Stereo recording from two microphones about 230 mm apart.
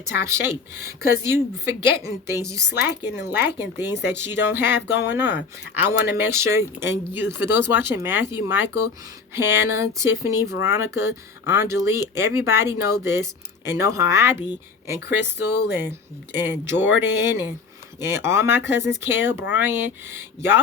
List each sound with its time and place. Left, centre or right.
0.0 s speech: centre
15.4 s speech: left
16.3 s speech: centre
18.0 s speech: centre